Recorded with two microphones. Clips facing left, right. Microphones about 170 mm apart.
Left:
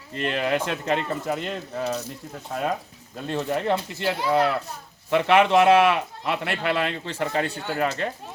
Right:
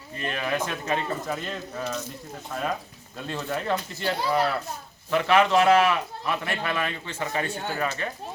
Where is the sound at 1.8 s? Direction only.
35° left (ahead or behind).